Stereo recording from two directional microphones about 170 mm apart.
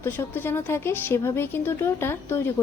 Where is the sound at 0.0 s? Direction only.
15° left (ahead or behind).